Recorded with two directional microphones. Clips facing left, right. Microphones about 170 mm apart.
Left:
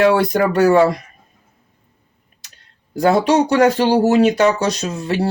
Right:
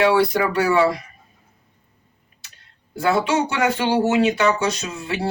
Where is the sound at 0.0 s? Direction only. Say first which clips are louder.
Left 3 dB; 45° left (ahead or behind).